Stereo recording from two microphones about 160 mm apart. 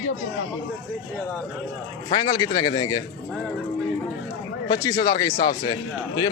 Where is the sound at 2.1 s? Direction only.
25° left (ahead or behind).